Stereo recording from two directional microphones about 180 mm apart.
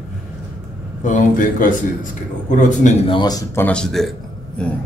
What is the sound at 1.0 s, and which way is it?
A man's voice, 45° left (ahead or behind).